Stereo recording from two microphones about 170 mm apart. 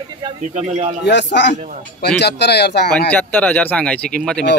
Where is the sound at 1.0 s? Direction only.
90° left.